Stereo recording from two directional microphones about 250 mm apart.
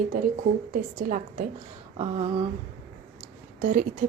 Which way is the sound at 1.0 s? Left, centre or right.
Right.